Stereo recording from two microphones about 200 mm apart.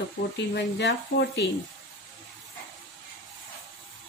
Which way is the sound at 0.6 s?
55° left (ahead or behind).